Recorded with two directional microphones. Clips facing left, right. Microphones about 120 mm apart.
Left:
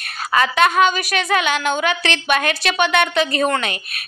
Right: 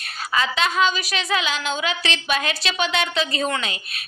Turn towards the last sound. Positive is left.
turn(degrees=60)  # may be behind; listen again after turning